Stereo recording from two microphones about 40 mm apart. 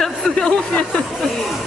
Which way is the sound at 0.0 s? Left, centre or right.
Centre.